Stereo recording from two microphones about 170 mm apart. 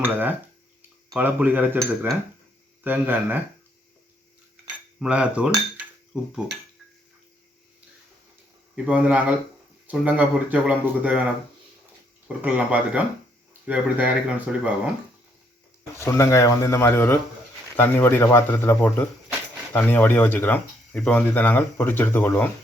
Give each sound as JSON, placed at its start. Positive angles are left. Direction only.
{"t": 0.0, "sound": "dishes", "side_deg": -10}
{"t": 0.8, "sound": "speech", "side_deg": -10}
{"t": 4.9, "sound": "speech", "side_deg": -5}
{"t": 8.7, "sound": "speech", "side_deg": -10}
{"t": 12.4, "sound": "speech", "side_deg": -5}
{"t": 16.0, "sound": "speech", "side_deg": 15}